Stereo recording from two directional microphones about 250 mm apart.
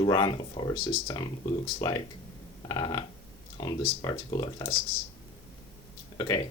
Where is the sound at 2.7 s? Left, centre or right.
Centre.